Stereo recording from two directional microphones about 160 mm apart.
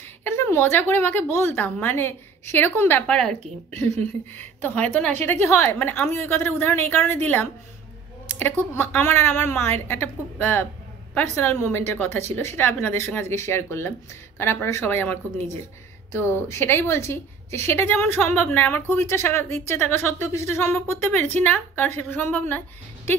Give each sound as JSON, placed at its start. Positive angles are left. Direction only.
{"t": 0.2, "sound": "a woman's voice", "side_deg": 15}